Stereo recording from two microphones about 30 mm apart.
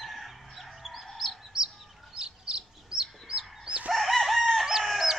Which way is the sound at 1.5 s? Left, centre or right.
Right.